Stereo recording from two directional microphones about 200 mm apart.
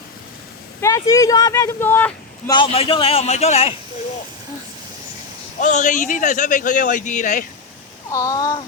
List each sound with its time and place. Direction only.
0.8 s speech: 15° left (ahead or behind)
2.5 s a man's voice: 25° left (ahead or behind)
5.5 s speech: 40° left (ahead or behind)
8.1 s speech: 15° left (ahead or behind)